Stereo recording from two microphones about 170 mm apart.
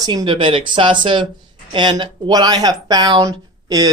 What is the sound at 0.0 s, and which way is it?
Speech, 25° right (ahead or behind).